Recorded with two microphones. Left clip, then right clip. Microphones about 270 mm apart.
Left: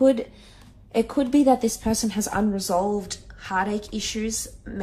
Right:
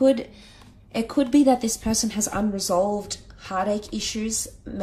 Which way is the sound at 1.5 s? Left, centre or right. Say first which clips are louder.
Left 1 dB; right.